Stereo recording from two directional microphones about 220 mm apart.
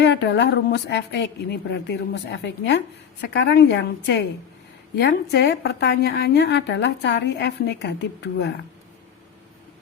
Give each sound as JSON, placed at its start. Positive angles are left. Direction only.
{"t": 0.0, "sound": "a woman's voice", "side_deg": 50}